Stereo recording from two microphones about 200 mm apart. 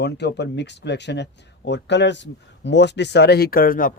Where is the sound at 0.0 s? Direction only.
55° left (ahead or behind).